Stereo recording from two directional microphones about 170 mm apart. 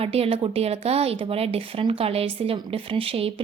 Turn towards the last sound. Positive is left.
turn(degrees=-35)  # may be behind; listen again after turning